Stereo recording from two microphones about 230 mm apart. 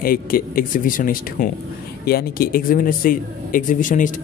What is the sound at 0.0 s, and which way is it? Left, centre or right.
Speech, left.